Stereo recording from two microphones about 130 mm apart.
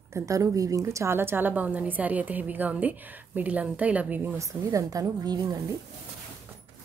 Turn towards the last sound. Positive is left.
turn(degrees=-30)  # may be behind; listen again after turning